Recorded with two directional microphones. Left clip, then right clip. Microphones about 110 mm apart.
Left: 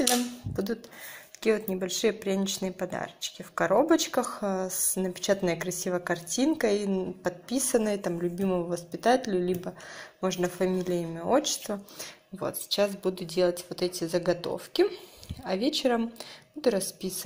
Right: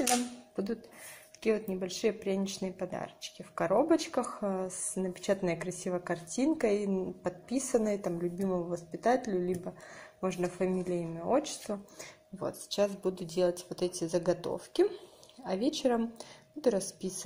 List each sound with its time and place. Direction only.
1.4 s speech: 5° right (ahead or behind)
8.1 s a woman's voice: 5° left (ahead or behind); by 17.2 s 20° right (ahead or behind)